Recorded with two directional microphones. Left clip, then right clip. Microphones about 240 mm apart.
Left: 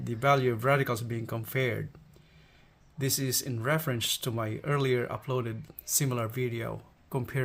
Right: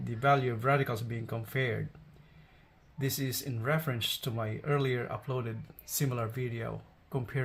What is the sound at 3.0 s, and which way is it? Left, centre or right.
Speech, left.